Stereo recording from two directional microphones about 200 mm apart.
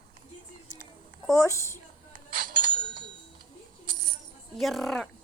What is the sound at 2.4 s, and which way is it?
Bicycle bell, 45° right (ahead or behind).